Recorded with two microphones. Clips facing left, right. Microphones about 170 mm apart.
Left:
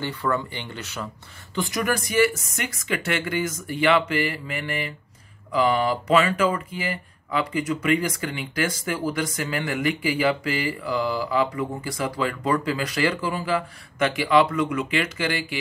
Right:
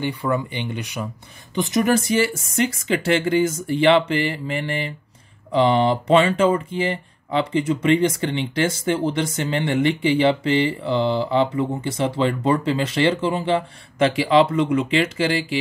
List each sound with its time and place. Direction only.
0.0 s speech: 15° right (ahead or behind)